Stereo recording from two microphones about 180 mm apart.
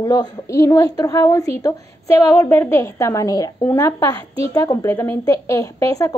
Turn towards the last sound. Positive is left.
turn(degrees=20)  # may be behind; listen again after turning